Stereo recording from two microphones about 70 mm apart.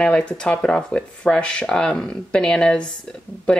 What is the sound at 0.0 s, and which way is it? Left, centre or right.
Speech, centre.